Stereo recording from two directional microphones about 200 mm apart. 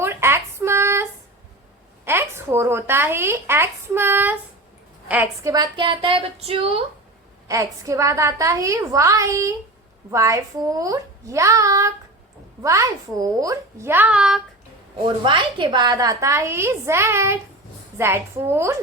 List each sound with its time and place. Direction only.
0.0 s a sound: 10° right (ahead or behind)
2.0 s speech: 10° right (ahead or behind); by 6.8 s 30° right (ahead or behind)
7.4 s a woman's voice: 15° right (ahead or behind)
15.0 s a woman's voice: 25° right (ahead or behind)